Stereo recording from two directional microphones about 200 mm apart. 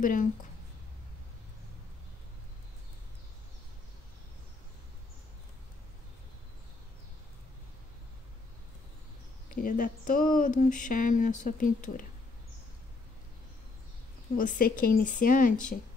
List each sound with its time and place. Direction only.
0.0 s speech: 40° left (ahead or behind)
9.5 s speech: 45° left (ahead or behind)
14.3 s speech: 45° left (ahead or behind)